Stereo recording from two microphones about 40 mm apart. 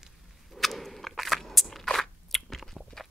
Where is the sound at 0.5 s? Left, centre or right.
Centre.